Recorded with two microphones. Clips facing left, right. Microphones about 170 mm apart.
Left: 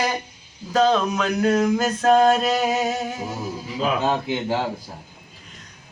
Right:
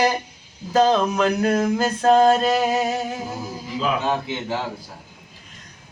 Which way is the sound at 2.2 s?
30° right (ahead or behind).